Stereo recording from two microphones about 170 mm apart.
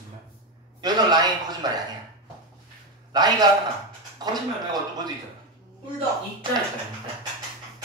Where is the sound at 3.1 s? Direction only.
25° right (ahead or behind).